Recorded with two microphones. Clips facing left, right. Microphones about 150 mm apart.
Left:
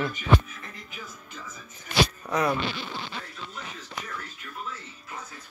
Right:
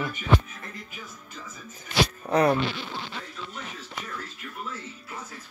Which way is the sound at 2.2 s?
35° right (ahead or behind).